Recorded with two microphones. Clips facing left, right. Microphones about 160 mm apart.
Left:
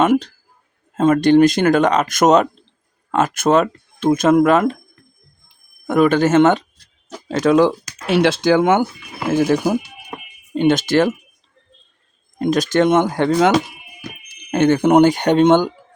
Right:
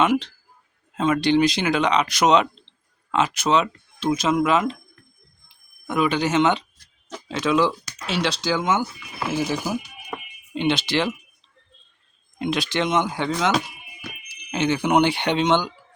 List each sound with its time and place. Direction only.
0.0 s speech: 45° left (ahead or behind)
5.8 s speech: 50° left (ahead or behind)
12.4 s speech: 45° left (ahead or behind)